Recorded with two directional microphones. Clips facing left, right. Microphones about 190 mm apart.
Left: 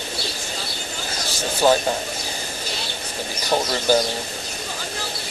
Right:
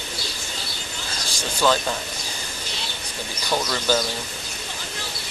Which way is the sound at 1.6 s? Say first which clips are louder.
Left 3 dB; 40° left (ahead or behind).